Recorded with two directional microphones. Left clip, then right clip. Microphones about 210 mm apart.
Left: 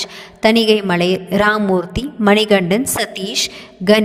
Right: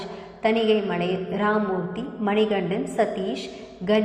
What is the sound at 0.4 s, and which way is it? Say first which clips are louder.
A woman's voice: left 8 dB; 70° left (ahead or behind).